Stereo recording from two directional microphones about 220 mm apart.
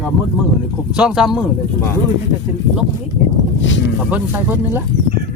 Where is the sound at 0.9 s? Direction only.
5° right (ahead or behind).